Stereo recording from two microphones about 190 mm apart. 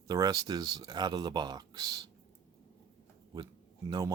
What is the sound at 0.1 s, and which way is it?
Speech, 20° right (ahead or behind).